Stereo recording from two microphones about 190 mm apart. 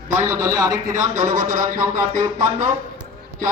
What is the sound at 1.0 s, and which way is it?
Speech, 40° right (ahead or behind).